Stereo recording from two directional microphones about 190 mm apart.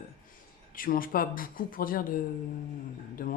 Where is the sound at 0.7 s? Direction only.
50° left (ahead or behind).